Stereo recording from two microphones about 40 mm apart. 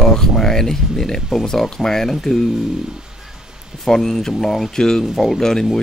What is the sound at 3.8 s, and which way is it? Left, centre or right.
Speech, centre.